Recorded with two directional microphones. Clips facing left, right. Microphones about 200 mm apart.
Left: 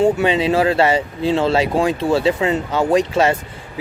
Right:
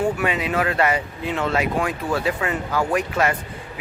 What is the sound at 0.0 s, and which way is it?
Speech, 25° left (ahead or behind).